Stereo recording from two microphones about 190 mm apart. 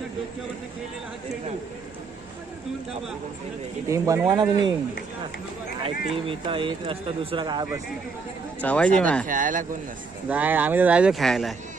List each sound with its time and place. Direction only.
3.9 s speech: 15° right (ahead or behind)
6.1 s speech: 30° right (ahead or behind)
8.5 s speech: 5° left (ahead or behind)
9.3 s a man's voice: 45° right (ahead or behind)
10.3 s speech: 10° right (ahead or behind)